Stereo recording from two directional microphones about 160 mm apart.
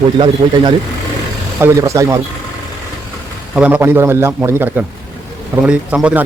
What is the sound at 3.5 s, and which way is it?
A man's voice, 10° right (ahead or behind).